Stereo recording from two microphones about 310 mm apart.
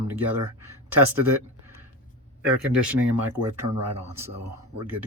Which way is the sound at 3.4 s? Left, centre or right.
Right.